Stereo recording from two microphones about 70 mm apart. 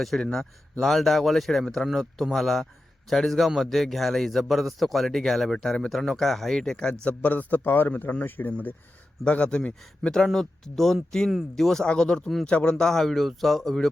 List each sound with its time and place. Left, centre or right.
0.0 s a man's voice: centre